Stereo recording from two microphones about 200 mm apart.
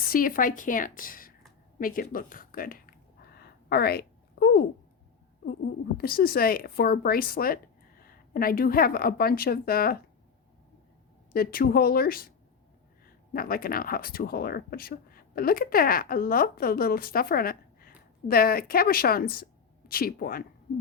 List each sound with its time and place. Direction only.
0.1 s speech: 45° left (ahead or behind)
1.8 s a sound: 45° left (ahead or behind)
6.0 s speech: 50° left (ahead or behind)
11.3 s speech: 50° left (ahead or behind)
13.3 s speech: 45° left (ahead or behind)